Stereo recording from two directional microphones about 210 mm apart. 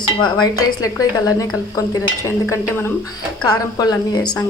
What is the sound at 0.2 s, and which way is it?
A woman's voice, 20° left (ahead or behind).